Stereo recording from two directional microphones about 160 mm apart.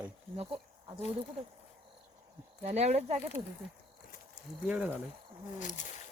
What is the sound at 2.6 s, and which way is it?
Speech, 45° right (ahead or behind).